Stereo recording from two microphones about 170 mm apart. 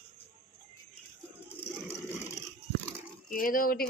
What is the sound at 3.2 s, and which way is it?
Speech, 55° left (ahead or behind).